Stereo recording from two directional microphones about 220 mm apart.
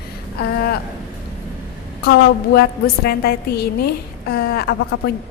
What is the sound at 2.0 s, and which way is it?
A woman's voice, 45° left (ahead or behind).